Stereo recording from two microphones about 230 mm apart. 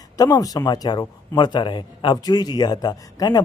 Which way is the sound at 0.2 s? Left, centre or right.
Centre.